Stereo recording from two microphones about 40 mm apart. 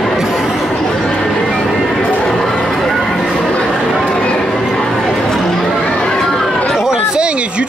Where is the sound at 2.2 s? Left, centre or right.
Centre.